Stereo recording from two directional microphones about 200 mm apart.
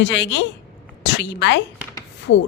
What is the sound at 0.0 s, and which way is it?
A woman's voice, 60° left (ahead or behind).